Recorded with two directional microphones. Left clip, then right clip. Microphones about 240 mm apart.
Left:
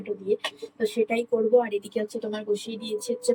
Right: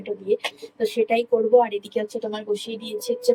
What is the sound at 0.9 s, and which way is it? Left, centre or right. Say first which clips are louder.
Speech: right 5 dB; centre.